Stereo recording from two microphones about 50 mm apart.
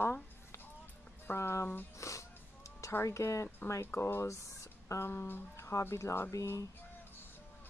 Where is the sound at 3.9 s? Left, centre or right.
Left.